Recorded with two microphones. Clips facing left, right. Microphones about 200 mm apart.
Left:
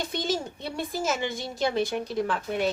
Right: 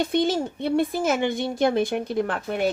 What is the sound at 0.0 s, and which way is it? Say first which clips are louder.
A woman's voice: right 7 dB; 55° right (ahead or behind).